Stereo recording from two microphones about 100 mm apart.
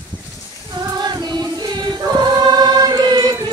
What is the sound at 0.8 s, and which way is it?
Music, 45° right (ahead or behind).